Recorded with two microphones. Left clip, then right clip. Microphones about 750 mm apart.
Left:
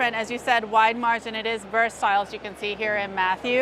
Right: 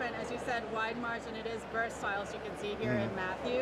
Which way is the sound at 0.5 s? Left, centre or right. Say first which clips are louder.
Left 18 dB; left.